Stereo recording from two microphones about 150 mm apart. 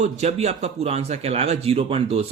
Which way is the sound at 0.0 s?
45° right (ahead or behind).